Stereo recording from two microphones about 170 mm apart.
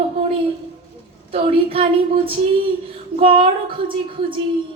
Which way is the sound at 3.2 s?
30° right (ahead or behind).